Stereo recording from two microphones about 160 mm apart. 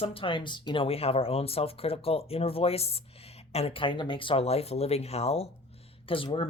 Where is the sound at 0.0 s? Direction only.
35° left (ahead or behind).